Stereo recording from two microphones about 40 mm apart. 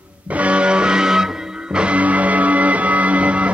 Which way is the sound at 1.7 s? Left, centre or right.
Right.